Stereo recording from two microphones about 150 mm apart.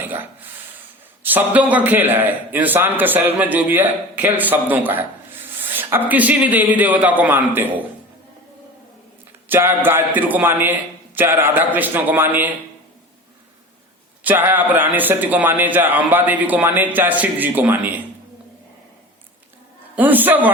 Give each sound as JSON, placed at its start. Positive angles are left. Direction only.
{"t": 0.0, "sound": "a sound", "side_deg": -15}
{"t": 1.2, "sound": "a man's voice", "side_deg": -10}
{"t": 9.5, "sound": "a man's voice", "side_deg": -15}
{"t": 14.3, "sound": "a man's voice", "side_deg": -15}
{"t": 20.0, "sound": "a man's voice", "side_deg": -10}